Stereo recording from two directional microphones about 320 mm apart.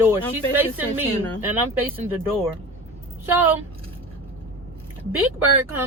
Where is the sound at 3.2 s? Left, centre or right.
Centre.